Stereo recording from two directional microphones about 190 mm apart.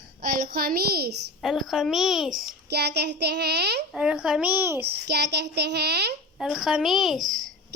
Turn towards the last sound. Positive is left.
turn(degrees=0)  # may be behind; listen again after turning